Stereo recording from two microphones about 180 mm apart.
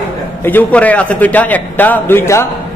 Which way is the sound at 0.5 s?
10° left (ahead or behind).